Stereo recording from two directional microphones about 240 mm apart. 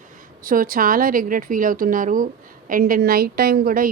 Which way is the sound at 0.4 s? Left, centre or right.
Right.